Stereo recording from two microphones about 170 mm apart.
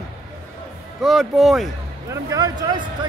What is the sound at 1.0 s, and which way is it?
Speech, centre (ahead or behind).